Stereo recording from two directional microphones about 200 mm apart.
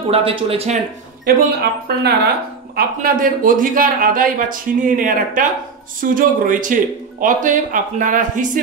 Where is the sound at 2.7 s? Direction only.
45° right (ahead or behind).